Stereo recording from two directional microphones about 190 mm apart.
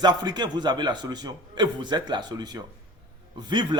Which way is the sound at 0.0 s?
20° right (ahead or behind).